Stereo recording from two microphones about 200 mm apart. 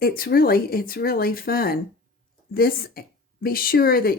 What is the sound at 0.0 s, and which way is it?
Speech, 50° left (ahead or behind).